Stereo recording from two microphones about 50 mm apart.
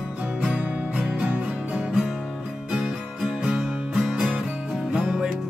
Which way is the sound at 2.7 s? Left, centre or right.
Centre.